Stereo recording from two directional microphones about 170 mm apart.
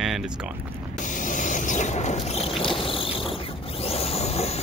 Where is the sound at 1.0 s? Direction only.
50° left (ahead or behind).